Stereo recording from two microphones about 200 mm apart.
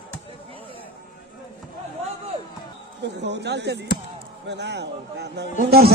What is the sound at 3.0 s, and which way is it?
A man's voice, 60° right (ahead or behind).